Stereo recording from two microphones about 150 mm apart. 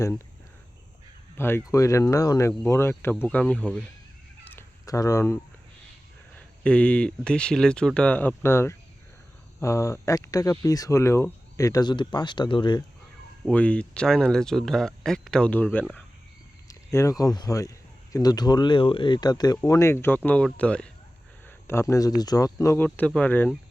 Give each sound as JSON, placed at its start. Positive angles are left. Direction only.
{"t": 1.4, "sound": "speech", "side_deg": 15}
{"t": 4.4, "sound": "cat", "side_deg": 20}
{"t": 6.3, "sound": "speech", "side_deg": 10}
{"t": 13.5, "sound": "speech", "side_deg": 10}
{"t": 16.6, "sound": "speech", "side_deg": 20}